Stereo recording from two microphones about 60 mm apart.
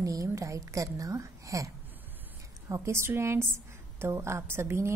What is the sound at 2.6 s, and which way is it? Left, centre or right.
A woman's voice, right.